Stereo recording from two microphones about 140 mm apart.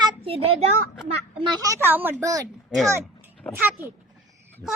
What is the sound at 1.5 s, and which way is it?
Speech, 25° right (ahead or behind).